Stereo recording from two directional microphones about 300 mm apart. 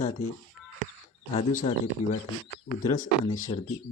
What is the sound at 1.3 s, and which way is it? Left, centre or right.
Speech, left.